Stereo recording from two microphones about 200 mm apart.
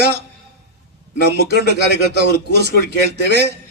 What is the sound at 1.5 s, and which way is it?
A man's voice, 55° right (ahead or behind).